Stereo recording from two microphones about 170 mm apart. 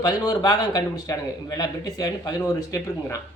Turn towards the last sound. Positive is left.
turn(degrees=20)  # may be behind; listen again after turning